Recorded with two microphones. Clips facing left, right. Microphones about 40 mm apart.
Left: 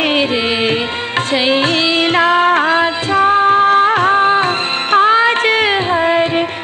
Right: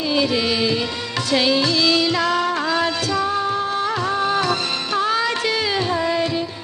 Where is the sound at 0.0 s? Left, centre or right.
Left.